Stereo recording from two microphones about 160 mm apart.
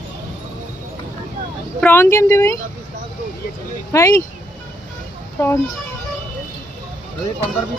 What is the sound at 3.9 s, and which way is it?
Speech, 20° left (ahead or behind).